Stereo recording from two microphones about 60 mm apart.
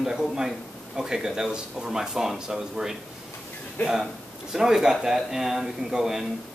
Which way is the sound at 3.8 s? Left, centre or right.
Left.